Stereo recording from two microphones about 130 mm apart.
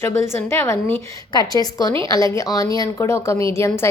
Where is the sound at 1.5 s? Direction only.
30° left (ahead or behind).